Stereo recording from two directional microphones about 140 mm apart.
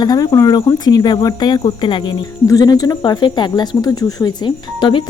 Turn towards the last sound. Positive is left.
turn(degrees=30)  # may be behind; listen again after turning